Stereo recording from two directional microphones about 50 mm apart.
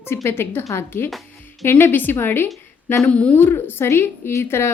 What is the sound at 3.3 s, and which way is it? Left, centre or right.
A woman's voice, left.